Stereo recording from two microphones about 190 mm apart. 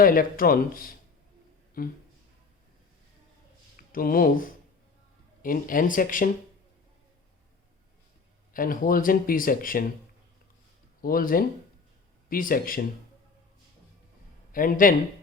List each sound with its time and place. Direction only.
0.0 s speech: 50° left (ahead or behind)
3.9 s speech: 50° left (ahead or behind)
8.5 s speech: 45° left (ahead or behind)
11.0 s speech: 50° left (ahead or behind)
14.5 s speech: 45° left (ahead or behind)